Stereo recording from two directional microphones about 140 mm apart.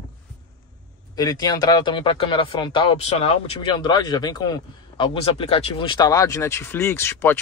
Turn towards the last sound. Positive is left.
turn(degrees=15)  # may be behind; listen again after turning